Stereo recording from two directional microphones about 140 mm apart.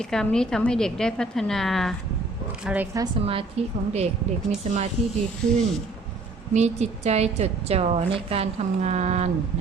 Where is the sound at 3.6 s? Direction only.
45° right (ahead or behind).